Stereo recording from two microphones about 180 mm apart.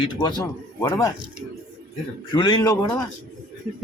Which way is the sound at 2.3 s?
25° left (ahead or behind).